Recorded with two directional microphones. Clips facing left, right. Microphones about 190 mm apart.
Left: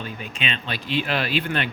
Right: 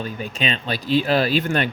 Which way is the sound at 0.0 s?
40° right (ahead or behind).